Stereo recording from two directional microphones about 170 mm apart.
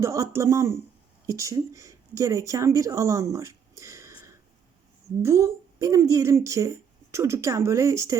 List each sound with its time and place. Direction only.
0.0 s a woman's voice: 20° right (ahead or behind)